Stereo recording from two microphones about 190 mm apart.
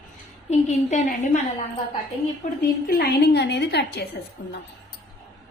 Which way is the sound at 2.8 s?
50° left (ahead or behind).